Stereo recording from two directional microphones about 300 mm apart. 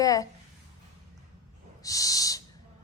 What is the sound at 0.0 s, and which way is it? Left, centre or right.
Speech, centre.